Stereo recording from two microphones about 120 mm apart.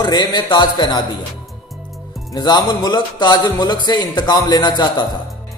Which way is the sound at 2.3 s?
35° left (ahead or behind).